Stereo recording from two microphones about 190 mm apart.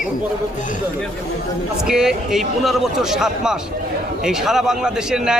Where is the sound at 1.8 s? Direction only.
5° right (ahead or behind).